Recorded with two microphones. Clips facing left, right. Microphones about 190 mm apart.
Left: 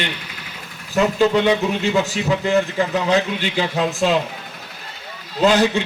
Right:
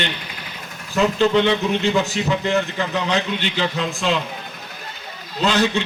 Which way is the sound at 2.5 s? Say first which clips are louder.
Left 3 dB; 45° left (ahead or behind).